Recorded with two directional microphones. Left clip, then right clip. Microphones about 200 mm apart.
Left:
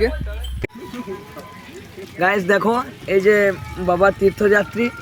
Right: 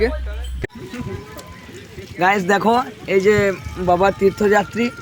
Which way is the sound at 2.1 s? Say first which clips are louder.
Right 1 dB; 20° right (ahead or behind).